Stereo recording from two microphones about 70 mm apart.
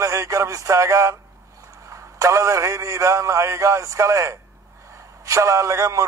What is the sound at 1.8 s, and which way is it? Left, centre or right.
A man's voice, right.